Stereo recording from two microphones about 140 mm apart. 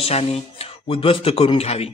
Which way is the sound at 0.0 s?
45° left (ahead or behind).